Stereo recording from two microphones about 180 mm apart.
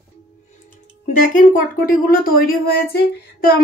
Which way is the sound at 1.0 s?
50° left (ahead or behind).